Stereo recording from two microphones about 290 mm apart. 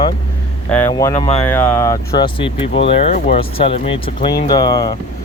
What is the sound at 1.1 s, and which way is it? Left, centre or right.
Speech, left.